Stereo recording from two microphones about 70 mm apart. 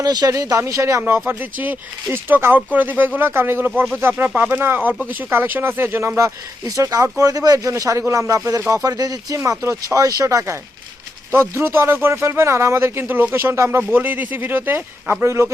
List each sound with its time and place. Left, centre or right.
0.0 s speech: right
1.3 s speech: right
6.1 s speech: right
7.7 s speech: right
9.4 s speech: right
11.3 s speech: right
13.9 s speech: right